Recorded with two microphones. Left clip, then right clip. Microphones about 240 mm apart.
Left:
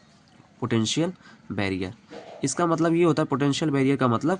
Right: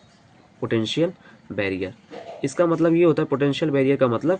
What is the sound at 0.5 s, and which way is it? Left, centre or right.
Speech, left.